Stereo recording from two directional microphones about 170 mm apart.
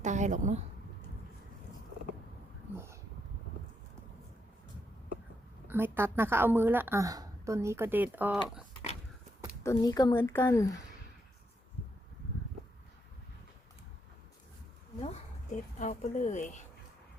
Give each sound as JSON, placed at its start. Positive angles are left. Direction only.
{"t": 0.0, "sound": "a woman's voice", "side_deg": -45}
{"t": 2.7, "sound": "speech", "side_deg": -15}
{"t": 5.6, "sound": "a woman's voice", "side_deg": -10}
{"t": 9.6, "sound": "speech", "side_deg": 20}
{"t": 15.0, "sound": "speech", "side_deg": 45}